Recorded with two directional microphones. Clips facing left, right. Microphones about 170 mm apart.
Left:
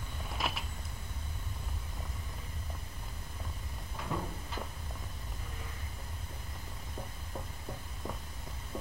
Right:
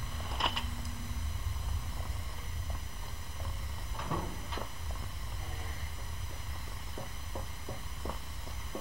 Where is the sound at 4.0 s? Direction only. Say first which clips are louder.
Even; centre (ahead or behind).